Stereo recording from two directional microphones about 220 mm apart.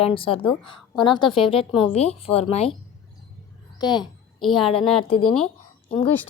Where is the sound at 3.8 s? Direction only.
20° left (ahead or behind).